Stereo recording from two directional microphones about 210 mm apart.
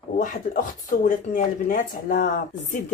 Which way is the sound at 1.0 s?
40° left (ahead or behind).